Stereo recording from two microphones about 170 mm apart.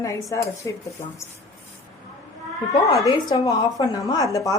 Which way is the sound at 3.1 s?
25° left (ahead or behind).